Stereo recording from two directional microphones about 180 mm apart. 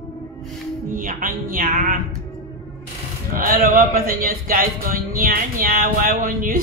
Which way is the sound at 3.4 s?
55° right (ahead or behind).